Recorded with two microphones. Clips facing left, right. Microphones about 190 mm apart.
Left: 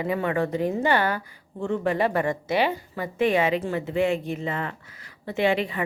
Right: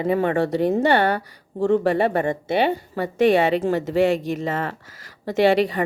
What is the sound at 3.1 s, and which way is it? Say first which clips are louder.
Speech: right 5 dB; 75° right (ahead or behind).